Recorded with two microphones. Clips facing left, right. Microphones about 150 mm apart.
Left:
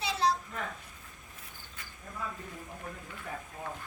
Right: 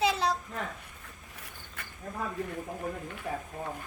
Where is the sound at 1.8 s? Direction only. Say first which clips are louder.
Right 5 dB; 60° right (ahead or behind).